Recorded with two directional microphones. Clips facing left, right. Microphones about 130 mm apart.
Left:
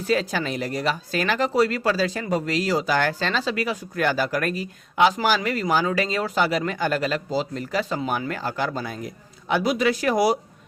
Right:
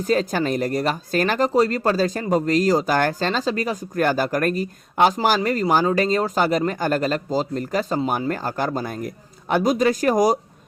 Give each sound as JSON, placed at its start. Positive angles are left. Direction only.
{"t": 0.0, "sound": "speech", "side_deg": -40}